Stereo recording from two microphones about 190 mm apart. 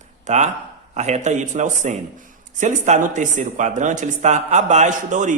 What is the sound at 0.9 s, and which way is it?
A man's voice, 40° right (ahead or behind).